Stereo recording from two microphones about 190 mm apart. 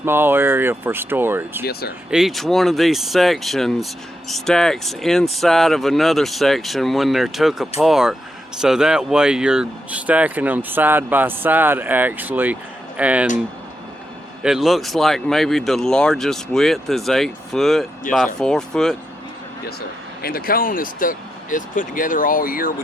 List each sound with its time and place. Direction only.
0.0 s speech: 10° right (ahead or behind)
14.4 s speech: centre (ahead or behind)
20.2 s speech: 50° left (ahead or behind)